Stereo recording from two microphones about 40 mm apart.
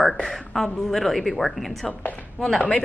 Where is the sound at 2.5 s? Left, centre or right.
Left.